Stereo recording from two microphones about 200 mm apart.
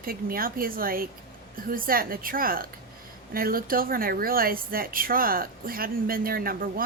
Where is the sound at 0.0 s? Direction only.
45° right (ahead or behind).